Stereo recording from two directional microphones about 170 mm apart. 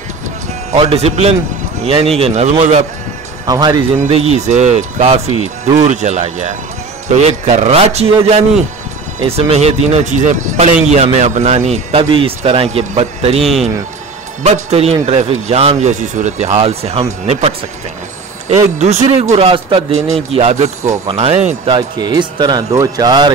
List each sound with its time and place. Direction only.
0.7 s speech: 35° right (ahead or behind)
3.4 s speech: 25° right (ahead or behind)
4.0 s speech: 40° right (ahead or behind)
13.4 s a man's voice: centre (ahead or behind)
14.4 s speech: 40° right (ahead or behind)
18.8 s speech: 40° right (ahead or behind)
21.7 s speech: 25° right (ahead or behind)